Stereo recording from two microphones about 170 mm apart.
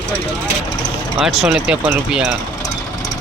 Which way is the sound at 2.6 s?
20° left (ahead or behind).